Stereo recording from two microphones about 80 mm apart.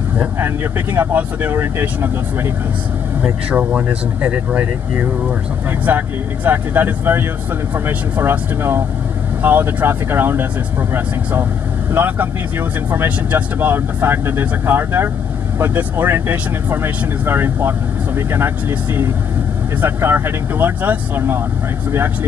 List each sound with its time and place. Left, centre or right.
0.9 s speech: right
3.2 s speech: centre
5.9 s speech: right
11.9 s speech: right